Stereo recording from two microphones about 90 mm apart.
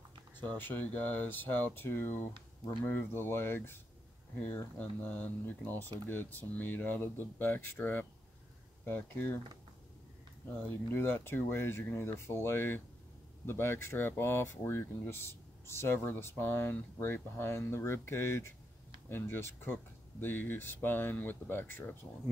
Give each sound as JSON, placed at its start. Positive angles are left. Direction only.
{"t": 0.6, "sound": "speech", "side_deg": 20}
{"t": 10.7, "sound": "speech", "side_deg": 25}